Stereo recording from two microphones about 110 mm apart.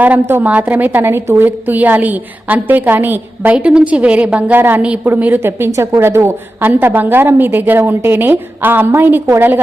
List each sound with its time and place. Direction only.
0.0 s a woman's voice: 15° right (ahead or behind)